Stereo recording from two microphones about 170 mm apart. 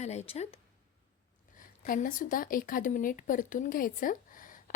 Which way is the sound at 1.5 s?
50° left (ahead or behind).